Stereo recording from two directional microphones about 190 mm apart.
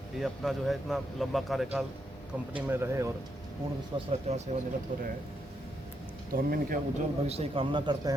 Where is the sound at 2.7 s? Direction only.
15° right (ahead or behind).